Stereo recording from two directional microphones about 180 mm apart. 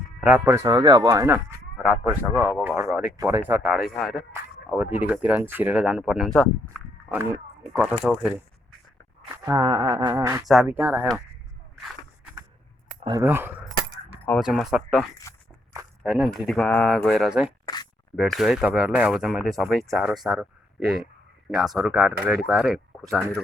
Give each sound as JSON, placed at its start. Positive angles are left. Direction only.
{"t": 0.2, "sound": "speech", "side_deg": -10}
{"t": 1.8, "sound": "speech", "side_deg": -5}
{"t": 3.5, "sound": "speech", "side_deg": 0}
{"t": 7.1, "sound": "speech", "side_deg": -10}
{"t": 9.3, "sound": "a sound", "side_deg": -20}
{"t": 10.4, "sound": "speech", "side_deg": 0}
{"t": 10.8, "sound": "speech", "side_deg": -15}
{"t": 13.1, "sound": "speech", "side_deg": -15}
{"t": 14.3, "sound": "speech", "side_deg": 0}
{"t": 16.0, "sound": "speech", "side_deg": 0}